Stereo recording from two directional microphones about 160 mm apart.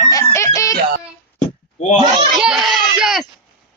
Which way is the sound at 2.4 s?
5° right (ahead or behind).